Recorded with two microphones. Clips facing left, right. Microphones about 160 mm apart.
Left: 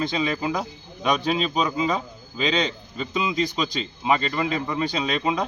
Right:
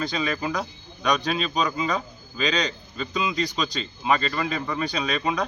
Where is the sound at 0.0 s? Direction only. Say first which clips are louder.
Left 2 dB; 25° left (ahead or behind).